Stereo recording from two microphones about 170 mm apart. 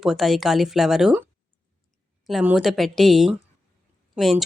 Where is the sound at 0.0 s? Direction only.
Centre (ahead or behind).